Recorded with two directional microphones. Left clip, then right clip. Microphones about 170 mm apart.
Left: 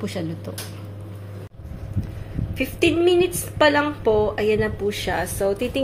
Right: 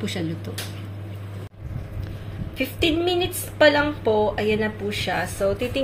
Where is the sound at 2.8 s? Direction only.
15° left (ahead or behind).